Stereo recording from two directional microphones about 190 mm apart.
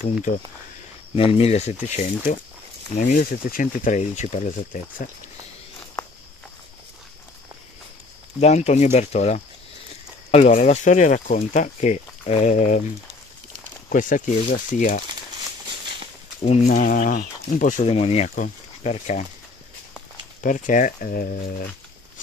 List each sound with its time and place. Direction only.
0.0 s speech: 45° left (ahead or behind)
1.1 s speech: 30° left (ahead or behind)
8.4 s speech: 35° left (ahead or behind)
13.8 s speech: 45° left (ahead or behind)
16.4 s speech: 40° left (ahead or behind)
20.4 s speech: 45° left (ahead or behind)